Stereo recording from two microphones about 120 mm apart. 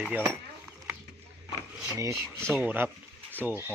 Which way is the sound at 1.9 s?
25° right (ahead or behind).